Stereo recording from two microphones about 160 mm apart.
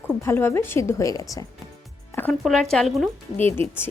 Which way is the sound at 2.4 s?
5° left (ahead or behind).